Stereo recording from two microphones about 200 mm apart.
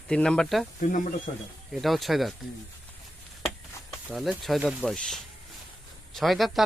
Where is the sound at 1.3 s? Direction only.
35° left (ahead or behind).